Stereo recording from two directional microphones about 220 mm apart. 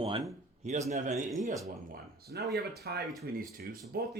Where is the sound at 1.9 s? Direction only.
45° right (ahead or behind).